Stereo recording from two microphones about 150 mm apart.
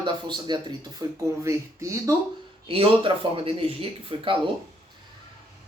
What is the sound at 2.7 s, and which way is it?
Speech, 35° right (ahead or behind).